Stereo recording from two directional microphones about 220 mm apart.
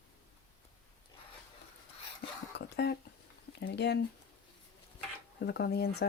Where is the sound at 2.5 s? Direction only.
50° left (ahead or behind).